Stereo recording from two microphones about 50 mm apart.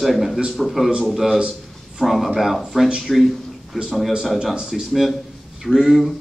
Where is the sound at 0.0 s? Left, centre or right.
Centre.